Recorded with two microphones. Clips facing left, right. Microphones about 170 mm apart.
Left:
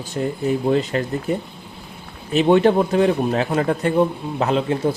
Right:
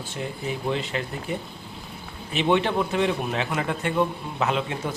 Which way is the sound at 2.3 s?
40° left (ahead or behind).